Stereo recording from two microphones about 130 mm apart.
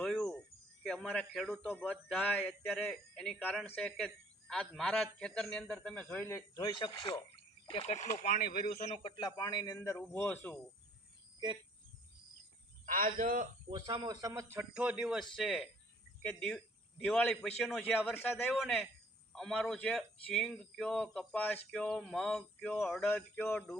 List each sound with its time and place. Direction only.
0.0 s cricket: 5° left (ahead or behind)
0.9 s a man's voice: 5° left (ahead or behind)
6.2 s speech: 20° left (ahead or behind)
6.7 s speech: 35° left (ahead or behind)
7.7 s speech: 55° left (ahead or behind); by 9.0 s 70° left (ahead or behind)
9.0 s a man's voice: 35° left (ahead or behind); by 10.6 s 15° left (ahead or behind)
12.8 s speech: 90° right
13.7 s a man's voice: 35° right (ahead or behind); by 18.3 s 15° left (ahead or behind)
18.5 s a man's voice: centre (ahead or behind)
23.0 s speech: centre (ahead or behind)
23.3 s a man's voice: 15° left (ahead or behind)